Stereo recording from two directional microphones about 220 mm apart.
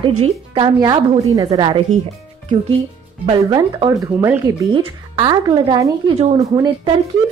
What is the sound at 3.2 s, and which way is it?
Speech, 20° right (ahead or behind).